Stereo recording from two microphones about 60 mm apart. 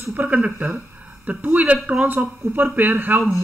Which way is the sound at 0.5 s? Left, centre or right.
Right.